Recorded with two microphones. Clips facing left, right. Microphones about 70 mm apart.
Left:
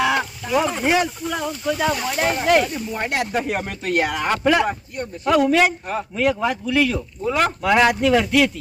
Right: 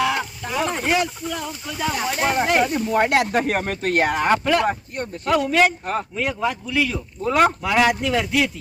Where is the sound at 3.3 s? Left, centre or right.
Right.